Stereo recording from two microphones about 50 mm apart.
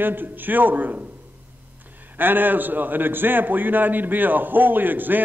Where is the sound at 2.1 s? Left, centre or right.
Right.